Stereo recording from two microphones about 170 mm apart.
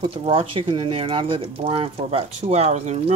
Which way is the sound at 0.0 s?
35° right (ahead or behind).